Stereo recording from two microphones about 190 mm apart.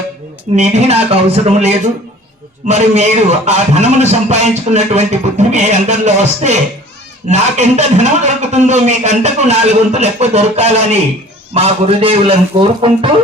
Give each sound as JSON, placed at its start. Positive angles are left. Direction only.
{"t": 0.5, "sound": "a man's voice", "side_deg": -35}